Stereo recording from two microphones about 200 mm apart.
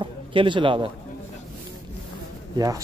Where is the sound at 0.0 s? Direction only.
25° right (ahead or behind).